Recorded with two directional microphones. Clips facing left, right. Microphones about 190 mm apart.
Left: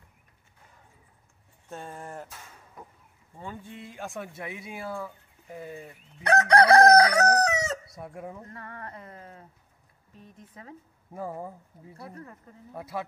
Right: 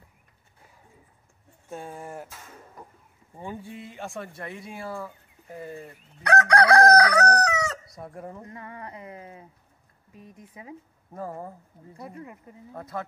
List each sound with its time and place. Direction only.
1.7 s speech: 10° right (ahead or behind)
3.3 s speech: 15° right (ahead or behind); by 5.9 s centre (ahead or behind)
6.2 s chicken: 25° left (ahead or behind)
7.9 s speech: 5° left (ahead or behind)
8.4 s speech: 15° right (ahead or behind)
11.1 s speech: 5° left (ahead or behind)
12.0 s speech: 10° right (ahead or behind)
12.7 s speech: 10° left (ahead or behind)